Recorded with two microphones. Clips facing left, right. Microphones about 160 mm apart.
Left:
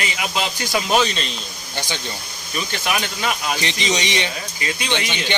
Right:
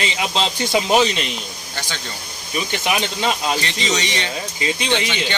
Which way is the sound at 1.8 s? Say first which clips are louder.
Left 3 dB; 15° left (ahead or behind).